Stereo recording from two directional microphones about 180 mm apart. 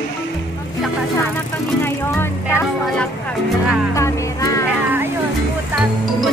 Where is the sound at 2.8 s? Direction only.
5° left (ahead or behind).